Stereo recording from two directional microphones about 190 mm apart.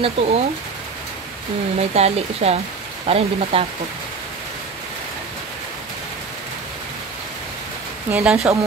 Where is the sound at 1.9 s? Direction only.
35° right (ahead or behind).